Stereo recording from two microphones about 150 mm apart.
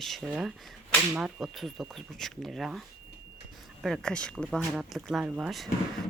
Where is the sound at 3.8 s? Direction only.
5° left (ahead or behind).